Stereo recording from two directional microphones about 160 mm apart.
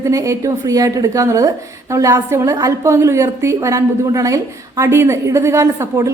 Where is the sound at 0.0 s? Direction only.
20° right (ahead or behind).